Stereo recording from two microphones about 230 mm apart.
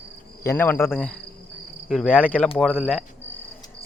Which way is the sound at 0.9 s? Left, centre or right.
Centre.